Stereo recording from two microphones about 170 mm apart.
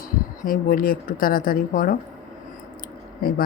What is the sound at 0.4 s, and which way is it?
Speech, 55° left (ahead or behind).